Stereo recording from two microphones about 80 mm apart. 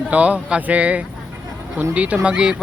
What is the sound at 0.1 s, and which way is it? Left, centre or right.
Speech, centre.